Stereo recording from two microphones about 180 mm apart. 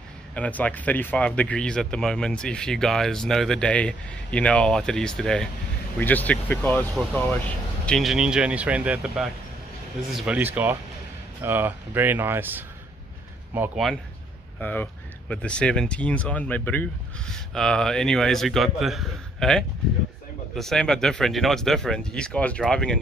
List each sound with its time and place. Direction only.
0.3 s speech: 10° left (ahead or behind)
14.6 s speech: 10° left (ahead or behind)